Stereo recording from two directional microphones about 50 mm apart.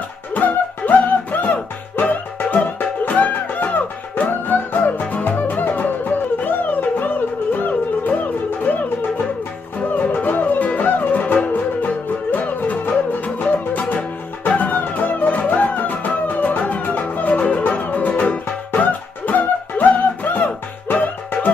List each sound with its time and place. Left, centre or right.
0.3 s music: left
9.8 s music: left